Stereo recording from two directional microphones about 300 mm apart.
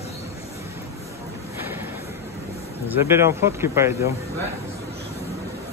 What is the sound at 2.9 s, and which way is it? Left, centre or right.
Speech, centre.